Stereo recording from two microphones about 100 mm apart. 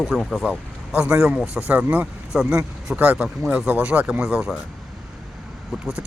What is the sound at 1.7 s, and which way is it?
Speech, 15° right (ahead or behind).